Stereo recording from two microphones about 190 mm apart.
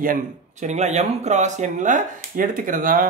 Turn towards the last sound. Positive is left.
turn(degrees=-45)  # may be behind; listen again after turning